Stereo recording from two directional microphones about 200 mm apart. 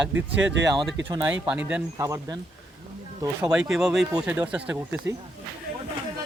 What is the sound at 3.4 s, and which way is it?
A man's voice, 5° right (ahead or behind).